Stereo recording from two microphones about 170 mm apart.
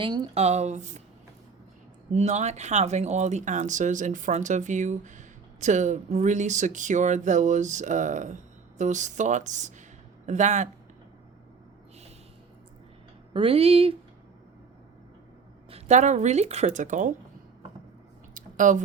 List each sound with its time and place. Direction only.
0.0 s speech: 25° right (ahead or behind)
0.3 s speech: 40° right (ahead or behind)
2.1 s speech: 40° right (ahead or behind)
13.3 s speech: 35° right (ahead or behind)
15.7 s speech: 45° right (ahead or behind)
18.3 s a sound: 50° right (ahead or behind)